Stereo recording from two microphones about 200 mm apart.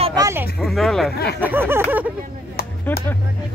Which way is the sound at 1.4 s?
10° right (ahead or behind).